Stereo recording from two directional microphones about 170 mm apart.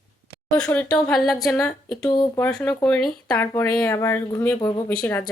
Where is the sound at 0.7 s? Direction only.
5° left (ahead or behind).